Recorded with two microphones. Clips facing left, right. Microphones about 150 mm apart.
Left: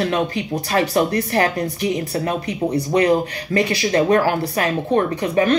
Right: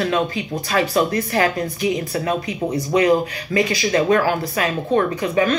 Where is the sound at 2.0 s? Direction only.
35° left (ahead or behind).